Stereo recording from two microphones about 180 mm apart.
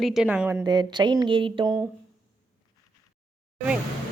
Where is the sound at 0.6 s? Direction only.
25° right (ahead or behind).